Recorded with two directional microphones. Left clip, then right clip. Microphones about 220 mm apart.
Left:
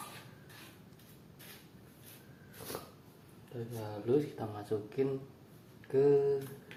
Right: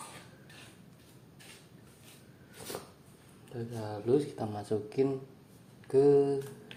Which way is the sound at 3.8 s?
40° right (ahead or behind).